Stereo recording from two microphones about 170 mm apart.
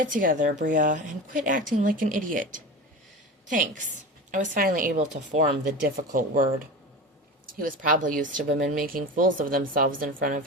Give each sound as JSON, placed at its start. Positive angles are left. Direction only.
{"t": 0.0, "sound": "speech", "side_deg": -55}
{"t": 7.6, "sound": "speech", "side_deg": -55}
{"t": 8.4, "sound": "speech", "side_deg": -65}